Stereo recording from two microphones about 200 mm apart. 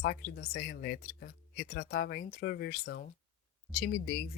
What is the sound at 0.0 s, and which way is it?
Speech, 50° left (ahead or behind).